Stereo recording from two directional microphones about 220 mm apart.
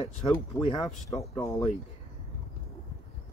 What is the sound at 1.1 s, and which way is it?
Speech, 15° left (ahead or behind).